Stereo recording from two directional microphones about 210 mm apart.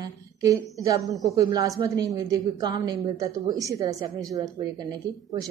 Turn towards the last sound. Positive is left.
turn(degrees=-15)  # may be behind; listen again after turning